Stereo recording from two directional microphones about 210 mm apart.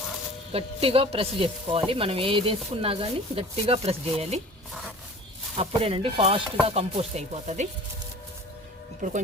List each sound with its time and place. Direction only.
0.5 s speech: 25° right (ahead or behind)
5.5 s speech: 25° right (ahead or behind)
9.0 s speech: 40° right (ahead or behind)